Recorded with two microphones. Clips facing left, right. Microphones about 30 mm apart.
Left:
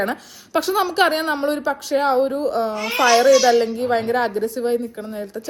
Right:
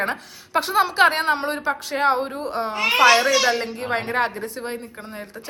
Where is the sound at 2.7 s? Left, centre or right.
Right.